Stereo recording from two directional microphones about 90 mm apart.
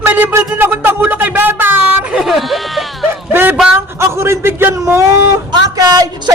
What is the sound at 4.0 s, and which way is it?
A man's voice, 30° right (ahead or behind).